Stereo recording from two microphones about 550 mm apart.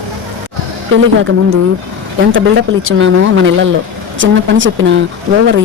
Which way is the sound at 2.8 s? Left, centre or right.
Right.